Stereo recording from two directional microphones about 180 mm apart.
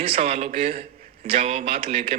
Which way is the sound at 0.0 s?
35° right (ahead or behind).